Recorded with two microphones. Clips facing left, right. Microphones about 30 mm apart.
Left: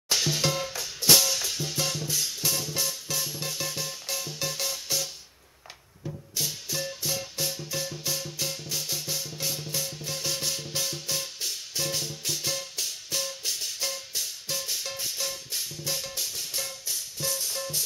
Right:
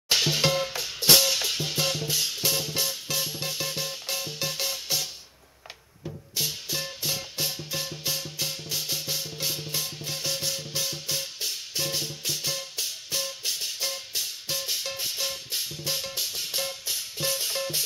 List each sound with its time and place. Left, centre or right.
0.1 s music: right
6.3 s music: right